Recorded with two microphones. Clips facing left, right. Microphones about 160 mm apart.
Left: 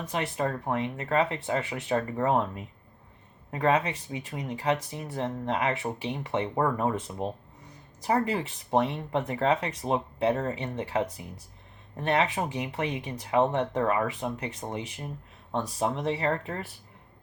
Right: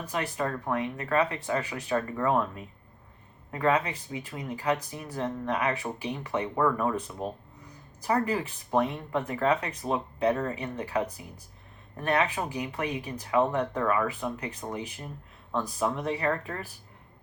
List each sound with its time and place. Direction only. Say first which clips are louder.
0.1 s speech: left 1 dB; 25° left (ahead or behind)